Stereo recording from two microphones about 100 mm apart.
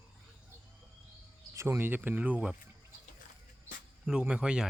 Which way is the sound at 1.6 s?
25° right (ahead or behind).